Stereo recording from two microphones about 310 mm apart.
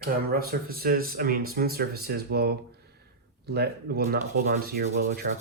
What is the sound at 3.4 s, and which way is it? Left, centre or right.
Sanding, right.